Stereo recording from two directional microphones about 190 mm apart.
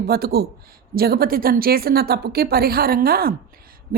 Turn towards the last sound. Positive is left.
turn(degrees=-50)  # may be behind; listen again after turning